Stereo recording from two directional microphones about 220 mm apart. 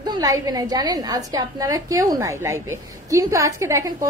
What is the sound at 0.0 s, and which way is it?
A woman's voice, 15° right (ahead or behind).